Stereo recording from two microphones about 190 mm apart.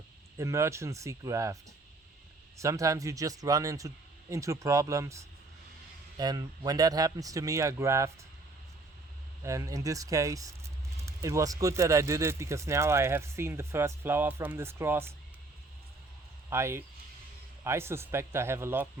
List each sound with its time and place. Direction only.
0.3 s speech: 15° right (ahead or behind)
2.6 s speech: 15° right (ahead or behind)
9.4 s speech: 15° right (ahead or behind)
16.5 s speech: 15° right (ahead or behind)